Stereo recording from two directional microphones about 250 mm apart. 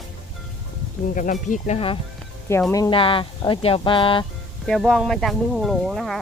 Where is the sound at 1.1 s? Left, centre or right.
Left.